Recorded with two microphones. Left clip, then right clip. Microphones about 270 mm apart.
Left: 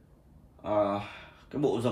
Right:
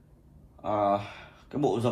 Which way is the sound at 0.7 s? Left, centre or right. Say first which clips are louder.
Right 2 dB; centre.